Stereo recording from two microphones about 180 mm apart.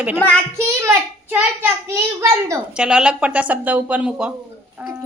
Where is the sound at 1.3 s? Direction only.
10° right (ahead or behind).